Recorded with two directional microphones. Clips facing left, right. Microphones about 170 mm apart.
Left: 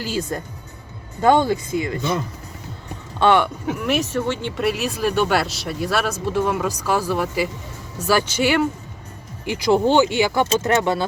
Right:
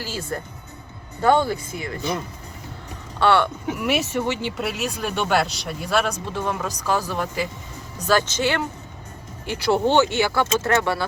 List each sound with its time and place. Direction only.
0.0 s speech: 20° left (ahead or behind)
3.2 s speech: 15° left (ahead or behind)
3.8 s speech: 5° right (ahead or behind); by 11.0 s 20° left (ahead or behind)